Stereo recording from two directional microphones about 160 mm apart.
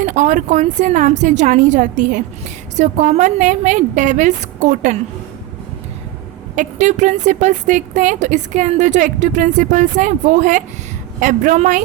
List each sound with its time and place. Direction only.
0.0 s a woman's voice: 50° right (ahead or behind)
6.6 s a woman's voice: 45° right (ahead or behind)